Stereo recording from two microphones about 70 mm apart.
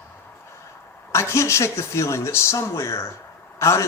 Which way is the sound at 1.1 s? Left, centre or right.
Left.